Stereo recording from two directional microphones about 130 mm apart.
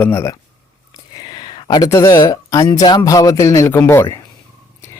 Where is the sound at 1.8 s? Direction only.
25° left (ahead or behind).